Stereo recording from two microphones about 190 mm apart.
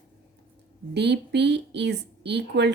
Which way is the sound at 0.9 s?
60° right (ahead or behind).